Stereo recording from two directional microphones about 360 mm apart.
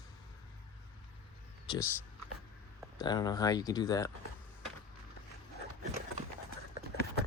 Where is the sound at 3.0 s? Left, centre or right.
Centre.